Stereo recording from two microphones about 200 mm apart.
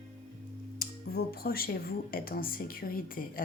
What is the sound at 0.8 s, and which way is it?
Speech, 50° left (ahead or behind).